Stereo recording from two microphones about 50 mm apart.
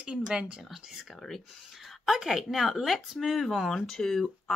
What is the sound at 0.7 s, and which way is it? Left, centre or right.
Speech, centre.